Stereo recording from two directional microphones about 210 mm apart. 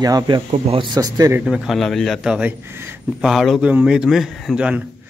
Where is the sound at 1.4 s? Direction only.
Centre (ahead or behind).